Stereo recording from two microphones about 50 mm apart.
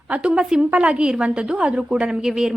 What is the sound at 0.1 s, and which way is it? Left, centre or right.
A woman's voice, right.